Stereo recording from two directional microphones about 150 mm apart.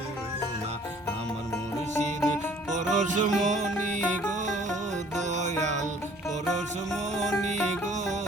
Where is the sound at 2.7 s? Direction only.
55° right (ahead or behind).